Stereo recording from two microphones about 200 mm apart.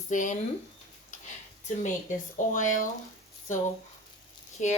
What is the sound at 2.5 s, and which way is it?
Speech, 40° left (ahead or behind).